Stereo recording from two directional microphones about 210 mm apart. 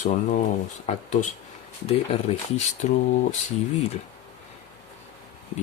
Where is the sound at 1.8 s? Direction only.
25° left (ahead or behind).